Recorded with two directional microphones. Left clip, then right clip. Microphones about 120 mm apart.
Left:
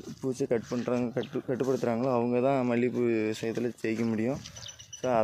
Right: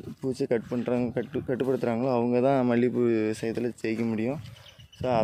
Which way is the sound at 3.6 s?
25° right (ahead or behind).